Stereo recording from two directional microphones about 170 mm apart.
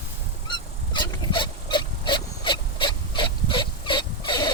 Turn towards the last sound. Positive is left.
turn(degrees=25)  # may be behind; listen again after turning